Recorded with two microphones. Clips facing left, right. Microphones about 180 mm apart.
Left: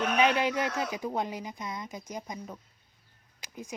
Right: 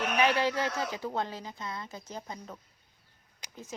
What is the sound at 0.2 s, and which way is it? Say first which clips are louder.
Speech: even; 20° left (ahead or behind).